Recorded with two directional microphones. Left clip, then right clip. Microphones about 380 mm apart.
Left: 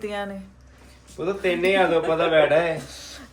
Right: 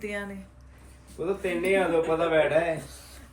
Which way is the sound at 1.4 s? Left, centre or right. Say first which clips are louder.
Left 6 dB; left.